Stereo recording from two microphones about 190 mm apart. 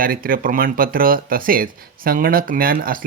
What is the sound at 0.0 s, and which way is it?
Speech, 50° right (ahead or behind).